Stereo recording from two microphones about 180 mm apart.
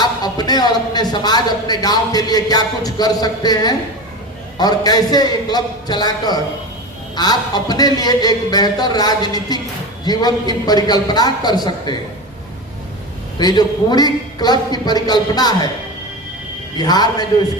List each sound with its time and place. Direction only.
0.0 s speech: 20° left (ahead or behind)
13.4 s speech: 20° left (ahead or behind)
16.7 s speech: 25° left (ahead or behind)